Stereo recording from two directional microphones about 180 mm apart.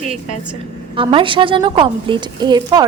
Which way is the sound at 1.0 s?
30° right (ahead or behind).